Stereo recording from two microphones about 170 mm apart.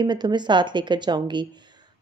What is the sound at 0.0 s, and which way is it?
A woman's voice, 25° right (ahead or behind).